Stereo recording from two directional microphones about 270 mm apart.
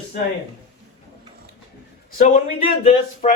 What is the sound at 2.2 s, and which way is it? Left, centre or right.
A man's voice, left.